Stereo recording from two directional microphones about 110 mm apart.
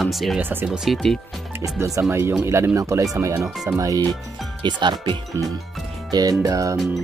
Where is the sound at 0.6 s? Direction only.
5° right (ahead or behind).